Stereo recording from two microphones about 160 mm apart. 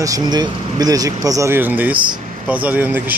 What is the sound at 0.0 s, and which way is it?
Speech, 25° right (ahead or behind).